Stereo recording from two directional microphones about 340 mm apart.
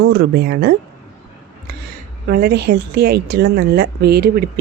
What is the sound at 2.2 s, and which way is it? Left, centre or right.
A woman's voice, right.